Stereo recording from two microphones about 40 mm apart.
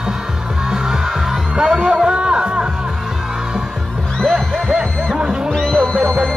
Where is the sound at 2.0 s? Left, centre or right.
Right.